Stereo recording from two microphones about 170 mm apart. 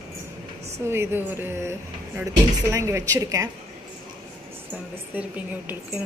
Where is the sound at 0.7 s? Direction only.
15° right (ahead or behind).